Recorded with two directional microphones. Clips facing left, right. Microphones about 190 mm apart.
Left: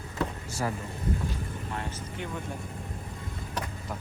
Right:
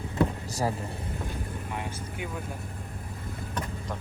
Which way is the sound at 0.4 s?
35° right (ahead or behind).